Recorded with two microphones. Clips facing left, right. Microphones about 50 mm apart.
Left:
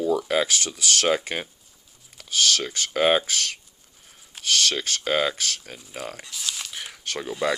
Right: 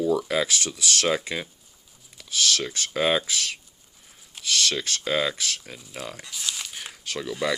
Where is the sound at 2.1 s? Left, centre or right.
Left.